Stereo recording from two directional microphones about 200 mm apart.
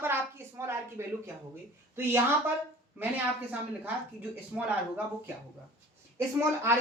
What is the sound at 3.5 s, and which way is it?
Speech, 5° right (ahead or behind).